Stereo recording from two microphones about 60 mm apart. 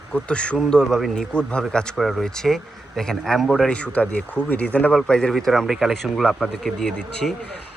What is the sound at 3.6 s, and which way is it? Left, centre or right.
Speech, centre.